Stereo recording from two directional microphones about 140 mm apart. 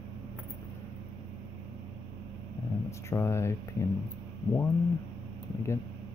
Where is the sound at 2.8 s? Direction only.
20° left (ahead or behind).